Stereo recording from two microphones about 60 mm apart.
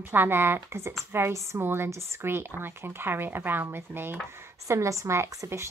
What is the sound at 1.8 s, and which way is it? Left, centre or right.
Speech, right.